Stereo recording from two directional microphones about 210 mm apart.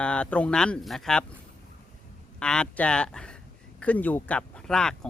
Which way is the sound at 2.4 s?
5° left (ahead or behind).